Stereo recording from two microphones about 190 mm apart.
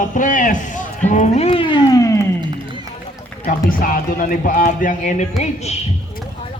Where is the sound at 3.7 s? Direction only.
50° left (ahead or behind).